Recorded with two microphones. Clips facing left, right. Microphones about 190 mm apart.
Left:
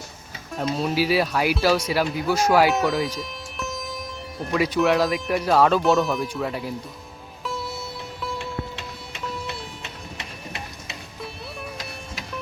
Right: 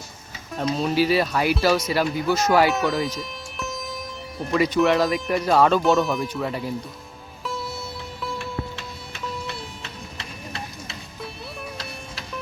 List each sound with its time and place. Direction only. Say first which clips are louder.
0.5 s speech: right 1 dB; 5° left (ahead or behind)
7.4 s music: even; centre (ahead or behind)
9.8 s music: even; 20° left (ahead or behind)